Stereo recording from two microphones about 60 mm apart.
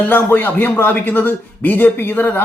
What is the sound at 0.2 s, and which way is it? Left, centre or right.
Speech, left.